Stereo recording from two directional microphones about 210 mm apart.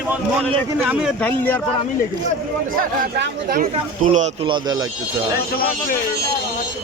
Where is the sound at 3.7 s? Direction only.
35° right (ahead or behind).